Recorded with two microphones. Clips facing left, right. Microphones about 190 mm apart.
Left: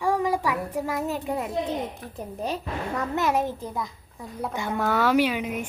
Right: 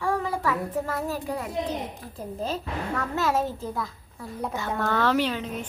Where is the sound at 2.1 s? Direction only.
15° left (ahead or behind).